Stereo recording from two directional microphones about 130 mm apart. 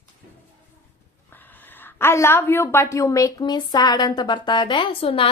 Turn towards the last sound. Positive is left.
turn(degrees=45)  # may be behind; listen again after turning